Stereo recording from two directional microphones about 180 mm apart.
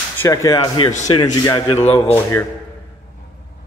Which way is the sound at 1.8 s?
35° left (ahead or behind).